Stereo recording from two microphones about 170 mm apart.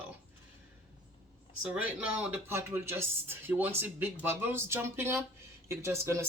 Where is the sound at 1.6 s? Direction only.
5° right (ahead or behind).